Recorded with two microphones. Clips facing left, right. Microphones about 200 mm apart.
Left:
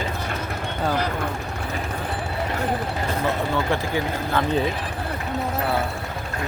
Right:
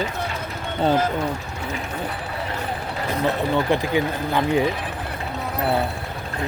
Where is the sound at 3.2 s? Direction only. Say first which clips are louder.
Right 4 dB; 15° right (ahead or behind).